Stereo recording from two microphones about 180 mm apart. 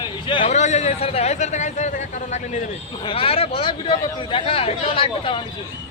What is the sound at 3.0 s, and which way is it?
Speech, 30° left (ahead or behind).